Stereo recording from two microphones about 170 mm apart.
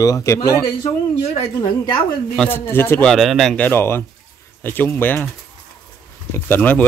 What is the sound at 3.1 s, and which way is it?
Speech, centre (ahead or behind).